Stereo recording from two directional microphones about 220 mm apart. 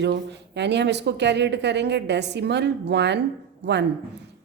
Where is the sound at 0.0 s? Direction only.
50° right (ahead or behind).